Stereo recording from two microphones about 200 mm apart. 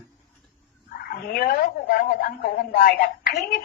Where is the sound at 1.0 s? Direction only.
45° left (ahead or behind).